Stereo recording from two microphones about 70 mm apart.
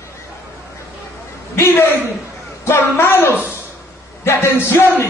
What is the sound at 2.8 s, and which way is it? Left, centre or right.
A man's voice, left.